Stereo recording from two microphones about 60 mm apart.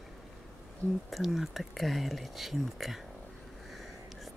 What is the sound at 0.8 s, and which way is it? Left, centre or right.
Speech, right.